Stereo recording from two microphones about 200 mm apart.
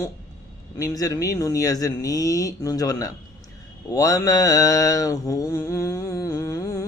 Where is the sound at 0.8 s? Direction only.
15° left (ahead or behind).